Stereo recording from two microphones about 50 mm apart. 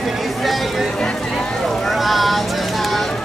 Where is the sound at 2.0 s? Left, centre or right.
Centre.